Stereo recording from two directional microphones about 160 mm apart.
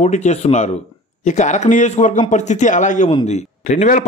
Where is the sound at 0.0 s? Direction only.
45° left (ahead or behind).